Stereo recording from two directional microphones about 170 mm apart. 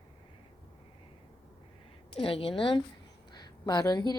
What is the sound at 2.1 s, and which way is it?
Speech, 35° left (ahead or behind).